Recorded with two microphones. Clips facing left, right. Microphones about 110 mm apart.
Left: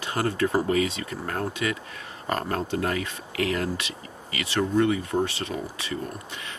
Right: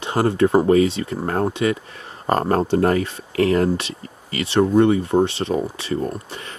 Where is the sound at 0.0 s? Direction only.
25° right (ahead or behind).